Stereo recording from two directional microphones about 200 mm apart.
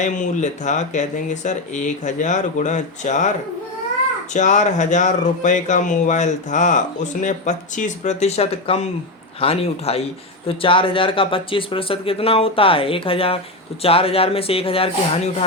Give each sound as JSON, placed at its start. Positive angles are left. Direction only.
{"t": 0.0, "sound": "speech", "side_deg": 40}
{"t": 4.4, "sound": "a man's voice", "side_deg": 35}